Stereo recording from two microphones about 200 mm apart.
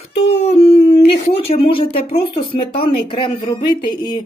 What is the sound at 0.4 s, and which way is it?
Humming, 30° left (ahead or behind).